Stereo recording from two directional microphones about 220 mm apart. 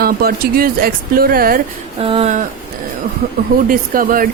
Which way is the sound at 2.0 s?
25° right (ahead or behind).